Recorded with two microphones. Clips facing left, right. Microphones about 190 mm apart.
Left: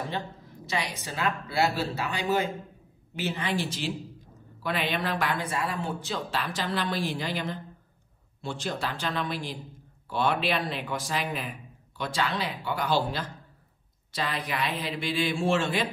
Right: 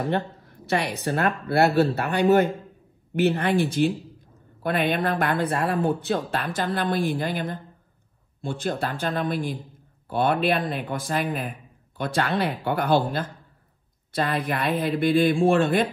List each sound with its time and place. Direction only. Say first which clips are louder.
0.1 s a man's voice: right 8 dB; 60° right (ahead or behind)